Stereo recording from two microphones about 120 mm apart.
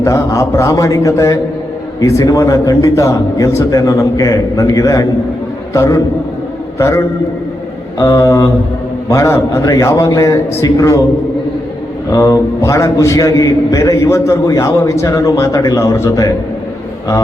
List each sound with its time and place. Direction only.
0.0 s a man's voice: 25° left (ahead or behind)
12.1 s a man's voice: 30° left (ahead or behind)